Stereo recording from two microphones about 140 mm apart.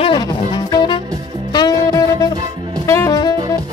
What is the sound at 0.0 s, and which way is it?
Music, 30° left (ahead or behind).